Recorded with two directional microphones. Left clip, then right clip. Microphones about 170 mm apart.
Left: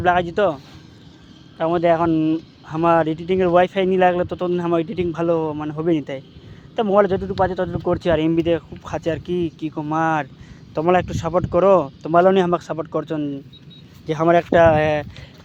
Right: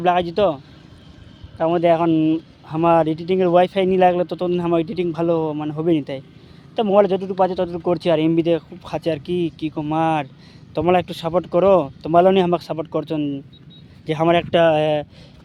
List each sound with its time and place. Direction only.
0.0 s speech: 20° right (ahead or behind)